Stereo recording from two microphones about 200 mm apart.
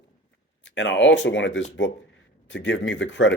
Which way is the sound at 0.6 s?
65° left (ahead or behind).